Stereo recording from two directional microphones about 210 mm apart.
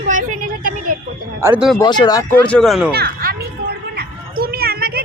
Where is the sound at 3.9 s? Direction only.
45° right (ahead or behind).